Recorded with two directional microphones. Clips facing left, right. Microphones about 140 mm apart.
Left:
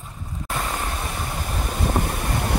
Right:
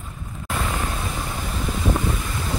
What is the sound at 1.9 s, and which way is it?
Wind, 60° left (ahead or behind).